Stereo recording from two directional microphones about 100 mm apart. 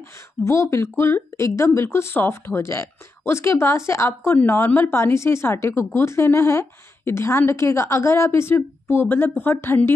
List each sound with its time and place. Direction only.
0.4 s speech: 30° left (ahead or behind)